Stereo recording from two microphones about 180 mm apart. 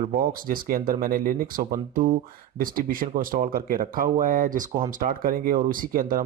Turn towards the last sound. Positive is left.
turn(degrees=-50)  # may be behind; listen again after turning